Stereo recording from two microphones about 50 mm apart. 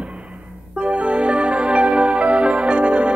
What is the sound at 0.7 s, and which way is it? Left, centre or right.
Music, right.